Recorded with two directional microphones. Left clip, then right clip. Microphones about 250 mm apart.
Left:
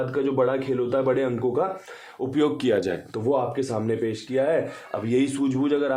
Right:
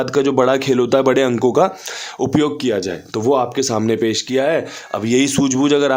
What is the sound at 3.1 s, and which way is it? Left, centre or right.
Speech, right.